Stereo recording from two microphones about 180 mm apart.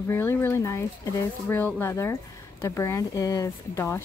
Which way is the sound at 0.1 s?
10° left (ahead or behind).